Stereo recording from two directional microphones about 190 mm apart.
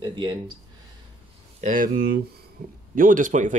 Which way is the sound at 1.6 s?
45° right (ahead or behind).